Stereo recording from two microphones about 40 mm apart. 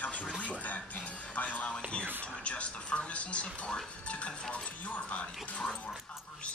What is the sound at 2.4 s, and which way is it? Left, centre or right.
Television, left.